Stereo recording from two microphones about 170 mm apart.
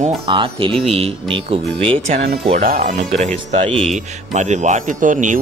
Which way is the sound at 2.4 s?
45° right (ahead or behind).